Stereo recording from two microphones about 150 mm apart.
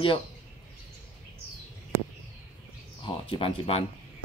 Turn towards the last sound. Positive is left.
turn(degrees=40)  # may be behind; listen again after turning